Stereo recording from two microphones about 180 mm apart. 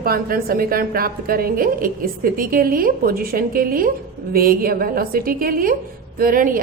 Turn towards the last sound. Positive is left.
turn(degrees=-50)  # may be behind; listen again after turning